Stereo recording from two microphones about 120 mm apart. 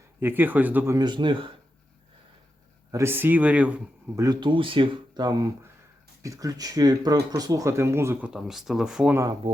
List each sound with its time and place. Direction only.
0.2 s speech: 15° right (ahead or behind)
0.9 s speech: 40° right (ahead or behind)
2.9 s speech: 20° right (ahead or behind)
4.1 s speech: 30° right (ahead or behind)
4.4 s speech: 40° right (ahead or behind); by 8.3 s 20° right (ahead or behind)
8.3 s speech: 5° right (ahead or behind)